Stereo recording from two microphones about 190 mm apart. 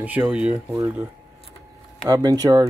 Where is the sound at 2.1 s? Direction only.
20° right (ahead or behind).